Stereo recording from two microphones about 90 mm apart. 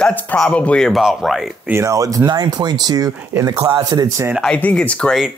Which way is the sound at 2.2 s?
50° right (ahead or behind).